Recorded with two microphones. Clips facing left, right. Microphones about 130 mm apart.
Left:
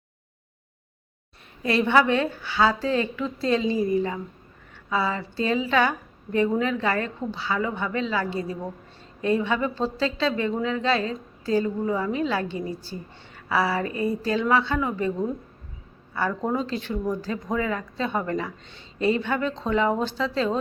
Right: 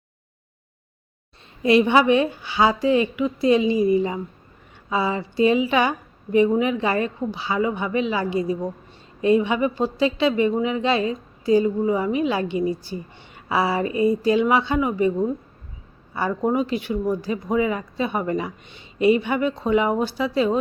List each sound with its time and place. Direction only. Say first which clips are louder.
1.6 s speech: right 4 dB; 15° right (ahead or behind)